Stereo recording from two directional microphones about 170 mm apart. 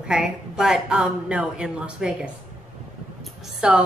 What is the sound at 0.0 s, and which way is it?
A woman's voice, 5° right (ahead or behind).